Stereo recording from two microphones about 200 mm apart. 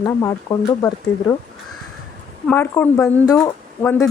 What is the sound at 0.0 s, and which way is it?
Speech, 15° left (ahead or behind).